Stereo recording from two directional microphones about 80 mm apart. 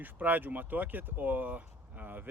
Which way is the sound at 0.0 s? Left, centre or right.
Right.